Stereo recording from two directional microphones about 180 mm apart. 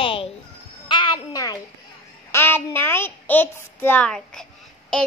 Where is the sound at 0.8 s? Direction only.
25° left (ahead or behind).